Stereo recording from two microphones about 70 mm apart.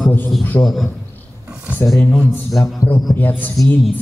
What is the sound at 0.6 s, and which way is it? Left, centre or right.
Speech, left.